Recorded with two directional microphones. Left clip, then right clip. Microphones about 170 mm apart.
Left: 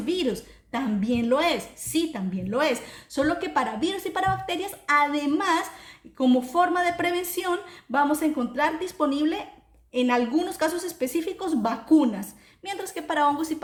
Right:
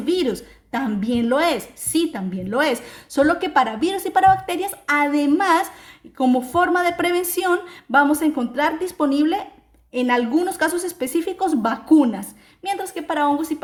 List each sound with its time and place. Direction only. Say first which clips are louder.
0.0 s a woman's voice: right 5 dB; 40° right (ahead or behind); by 13.6 s 20° right (ahead or behind)